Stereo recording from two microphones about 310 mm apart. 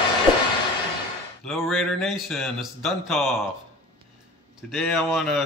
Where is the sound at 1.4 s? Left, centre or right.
Centre.